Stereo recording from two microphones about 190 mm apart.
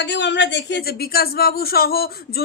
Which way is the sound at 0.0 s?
65° left (ahead or behind).